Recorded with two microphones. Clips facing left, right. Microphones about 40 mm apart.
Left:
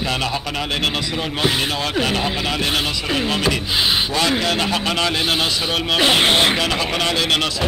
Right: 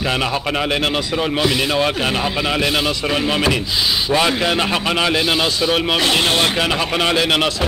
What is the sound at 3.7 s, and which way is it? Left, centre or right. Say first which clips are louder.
Speech: left 1 dB; left.